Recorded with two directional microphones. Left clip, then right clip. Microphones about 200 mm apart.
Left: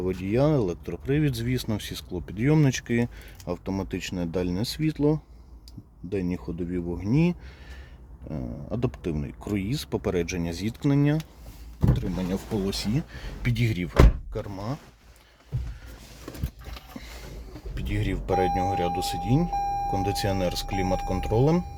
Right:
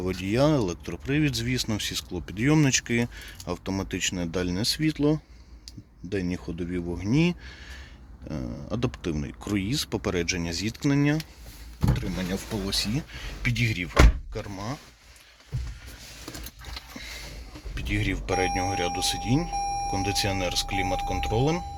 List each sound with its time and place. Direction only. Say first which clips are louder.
0.0 s speech: even; 10° left (ahead or behind)
12.6 s speech: right 1 dB; 25° left (ahead or behind)
17.7 s speech: right 3 dB; 15° left (ahead or behind); by 21.6 s 30° left (ahead or behind)